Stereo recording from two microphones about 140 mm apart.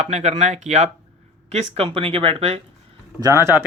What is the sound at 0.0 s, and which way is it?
Speech, 50° right (ahead or behind).